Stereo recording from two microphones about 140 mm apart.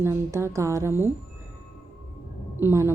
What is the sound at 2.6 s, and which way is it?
Speech, 20° right (ahead or behind).